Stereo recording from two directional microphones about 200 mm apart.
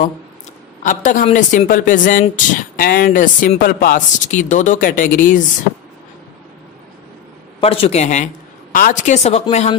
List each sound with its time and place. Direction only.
0.8 s speech: 40° left (ahead or behind)
7.6 s speech: 30° left (ahead or behind)